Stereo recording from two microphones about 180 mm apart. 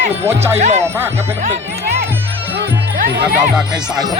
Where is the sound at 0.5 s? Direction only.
40° right (ahead or behind).